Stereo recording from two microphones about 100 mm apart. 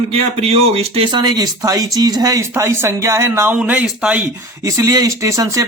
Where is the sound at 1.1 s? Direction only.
45° right (ahead or behind); by 3.5 s 25° right (ahead or behind).